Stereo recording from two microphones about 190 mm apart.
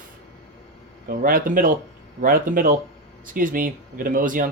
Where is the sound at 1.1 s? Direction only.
50° right (ahead or behind).